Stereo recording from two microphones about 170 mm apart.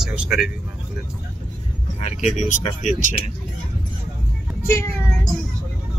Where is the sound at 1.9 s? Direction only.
45° left (ahead or behind).